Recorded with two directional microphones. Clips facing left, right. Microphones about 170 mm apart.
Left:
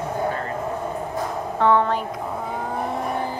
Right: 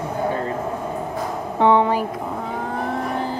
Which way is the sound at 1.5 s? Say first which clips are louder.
Right 3 dB; 15° right (ahead or behind).